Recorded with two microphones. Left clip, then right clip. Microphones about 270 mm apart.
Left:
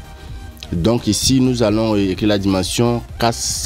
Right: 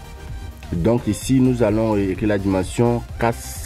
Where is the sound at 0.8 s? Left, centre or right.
Centre.